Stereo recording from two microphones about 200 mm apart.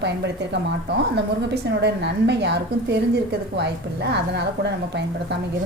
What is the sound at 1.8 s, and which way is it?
A woman's voice, 55° right (ahead or behind).